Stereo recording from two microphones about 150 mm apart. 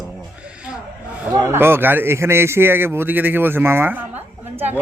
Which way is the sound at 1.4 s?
15° right (ahead or behind).